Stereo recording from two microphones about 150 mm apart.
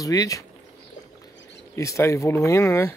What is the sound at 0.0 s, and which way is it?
Speech, 25° left (ahead or behind).